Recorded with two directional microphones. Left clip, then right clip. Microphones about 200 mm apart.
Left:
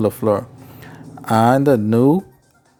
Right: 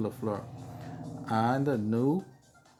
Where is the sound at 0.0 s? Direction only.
50° left (ahead or behind).